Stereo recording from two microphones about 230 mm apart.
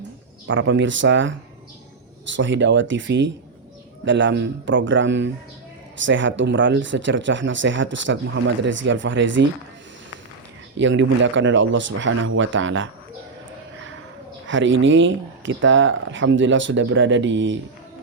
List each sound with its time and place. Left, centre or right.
0.4 s speech: right
2.3 s speech: right
10.8 s speech: right
14.4 s speech: right